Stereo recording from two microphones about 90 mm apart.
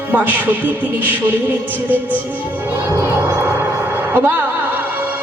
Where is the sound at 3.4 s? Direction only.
25° right (ahead or behind).